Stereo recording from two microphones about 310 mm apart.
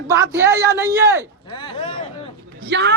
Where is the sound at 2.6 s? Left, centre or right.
Right.